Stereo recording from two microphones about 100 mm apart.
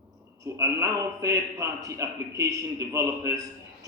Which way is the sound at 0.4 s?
30° right (ahead or behind).